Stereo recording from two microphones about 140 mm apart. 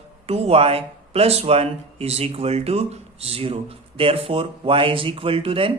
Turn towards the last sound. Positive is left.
turn(degrees=-40)  # may be behind; listen again after turning